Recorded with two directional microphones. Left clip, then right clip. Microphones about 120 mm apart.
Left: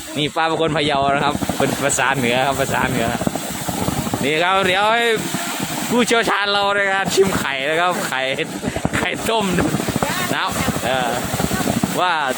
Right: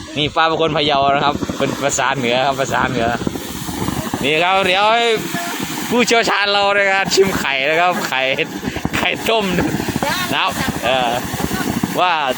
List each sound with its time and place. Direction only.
0.2 s speech: 15° left (ahead or behind)
1.6 s speech: 30° left (ahead or behind)
4.2 s speech: 10° left (ahead or behind)